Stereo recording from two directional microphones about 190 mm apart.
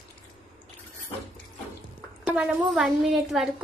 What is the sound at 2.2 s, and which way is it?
A woman's voice, 5° right (ahead or behind).